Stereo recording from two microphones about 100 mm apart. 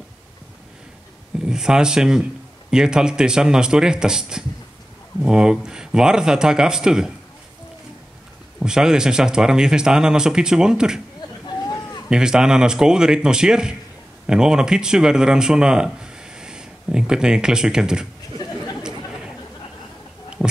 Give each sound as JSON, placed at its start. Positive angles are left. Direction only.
{"t": 1.4, "sound": "speech", "side_deg": -5}
{"t": 8.5, "sound": "speech", "side_deg": -5}
{"t": 11.6, "sound": "a sound", "side_deg": 35}
{"t": 12.1, "sound": "speech", "side_deg": -5}